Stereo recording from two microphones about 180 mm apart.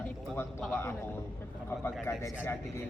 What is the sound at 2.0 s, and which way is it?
Speech, 15° left (ahead or behind).